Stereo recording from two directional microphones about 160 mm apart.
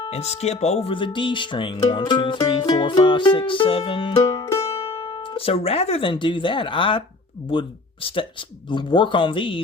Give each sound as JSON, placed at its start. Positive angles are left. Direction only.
{"t": 0.0, "sound": "speech", "side_deg": 40}
{"t": 4.8, "sound": "speech", "side_deg": 35}